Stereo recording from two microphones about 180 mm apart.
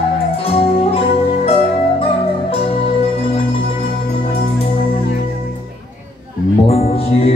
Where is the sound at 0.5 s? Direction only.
30° left (ahead or behind).